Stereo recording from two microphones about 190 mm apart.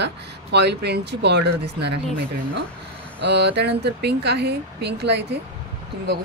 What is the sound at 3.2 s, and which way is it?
Speech, 60° right (ahead or behind).